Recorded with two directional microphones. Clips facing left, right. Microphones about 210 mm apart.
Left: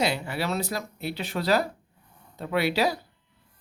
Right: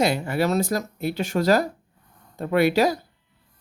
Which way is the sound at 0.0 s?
45° right (ahead or behind).